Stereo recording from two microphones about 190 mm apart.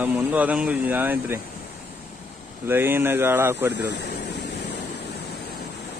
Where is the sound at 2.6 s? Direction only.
10° right (ahead or behind).